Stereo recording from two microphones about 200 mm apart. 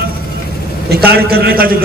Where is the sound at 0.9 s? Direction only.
50° right (ahead or behind).